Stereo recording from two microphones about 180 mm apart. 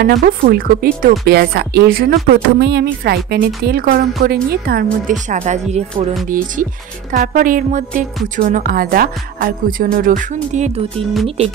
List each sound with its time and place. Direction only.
0.0 s a woman's voice: 55° right (ahead or behind)
5.3 s speech: 40° right (ahead or behind)
6.2 s speech: 45° right (ahead or behind)